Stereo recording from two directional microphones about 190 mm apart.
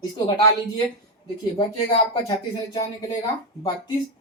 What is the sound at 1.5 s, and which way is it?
Speech, 25° left (ahead or behind).